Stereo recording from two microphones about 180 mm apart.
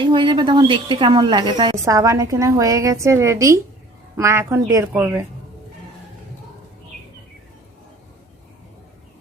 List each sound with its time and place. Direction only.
0.0 s a woman's voice: 25° right (ahead or behind)